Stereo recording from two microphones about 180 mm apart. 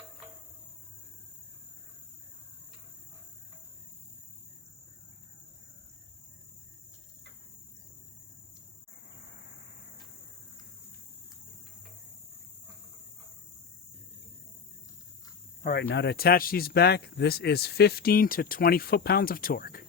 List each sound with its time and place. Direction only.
15.6 s speech: 60° left (ahead or behind)